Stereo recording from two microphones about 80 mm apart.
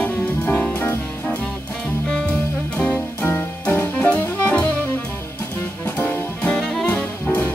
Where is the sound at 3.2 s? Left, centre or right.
Left.